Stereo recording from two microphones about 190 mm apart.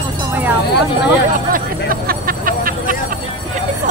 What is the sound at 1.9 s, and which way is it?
Vehicle, 50° right (ahead or behind).